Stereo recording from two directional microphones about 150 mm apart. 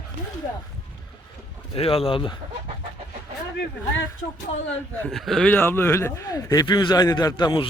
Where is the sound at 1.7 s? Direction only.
40° left (ahead or behind).